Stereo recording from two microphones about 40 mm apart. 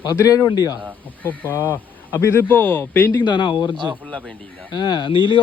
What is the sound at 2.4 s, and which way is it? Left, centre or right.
Speech, left.